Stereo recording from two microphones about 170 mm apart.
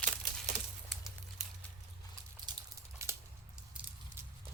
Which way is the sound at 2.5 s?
25° right (ahead or behind).